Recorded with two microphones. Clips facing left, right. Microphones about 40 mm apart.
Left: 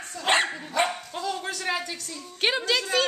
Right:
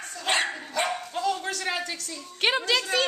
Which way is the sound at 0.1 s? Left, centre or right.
Centre.